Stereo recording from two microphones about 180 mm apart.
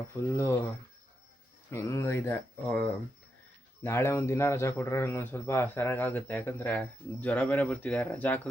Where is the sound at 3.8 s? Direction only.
15° left (ahead or behind).